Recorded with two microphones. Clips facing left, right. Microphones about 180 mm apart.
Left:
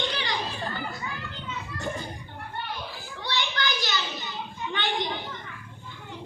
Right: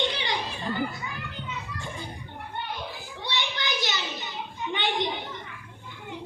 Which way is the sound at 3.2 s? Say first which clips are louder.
Left 2 dB; 20° right (ahead or behind).